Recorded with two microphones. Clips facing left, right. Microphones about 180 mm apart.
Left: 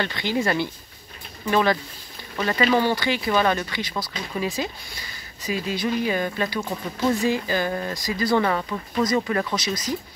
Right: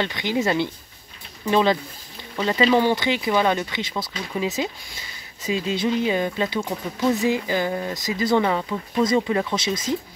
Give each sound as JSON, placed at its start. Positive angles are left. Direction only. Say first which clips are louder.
{"t": 0.0, "sound": "speech", "louder": "right 1 dB", "side_deg": -20}
{"t": 9.0, "sound": "speech", "louder": "right 2 dB", "side_deg": -25}